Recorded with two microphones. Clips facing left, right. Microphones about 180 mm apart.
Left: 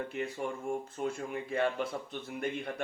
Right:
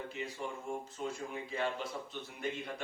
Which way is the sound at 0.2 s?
60° left (ahead or behind).